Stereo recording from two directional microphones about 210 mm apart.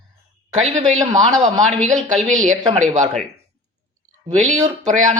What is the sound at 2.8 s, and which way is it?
Speech, 35° right (ahead or behind).